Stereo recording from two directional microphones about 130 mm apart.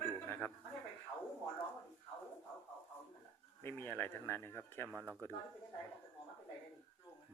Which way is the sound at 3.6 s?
15° left (ahead or behind).